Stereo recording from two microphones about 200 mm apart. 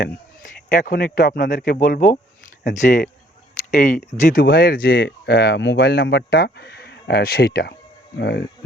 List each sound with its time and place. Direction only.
0.7 s speech: 45° left (ahead or behind)